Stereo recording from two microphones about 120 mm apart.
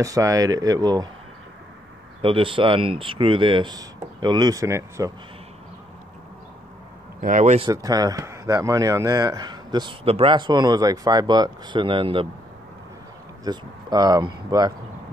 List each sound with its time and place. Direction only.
0.0 s speech: 30° right (ahead or behind)
2.2 s speech: 45° right (ahead or behind); by 5.1 s 25° right (ahead or behind)
7.2 s speech: 90° right
7.7 s speech: 30° right (ahead or behind)
10.0 s speech: 50° right (ahead or behind)
13.4 s speech: 35° right (ahead or behind)